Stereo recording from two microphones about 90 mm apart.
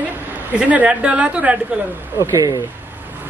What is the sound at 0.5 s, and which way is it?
A woman's voice, 15° right (ahead or behind).